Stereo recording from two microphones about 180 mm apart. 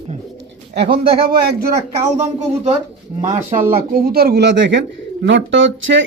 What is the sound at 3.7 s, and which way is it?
Speech, 55° right (ahead or behind).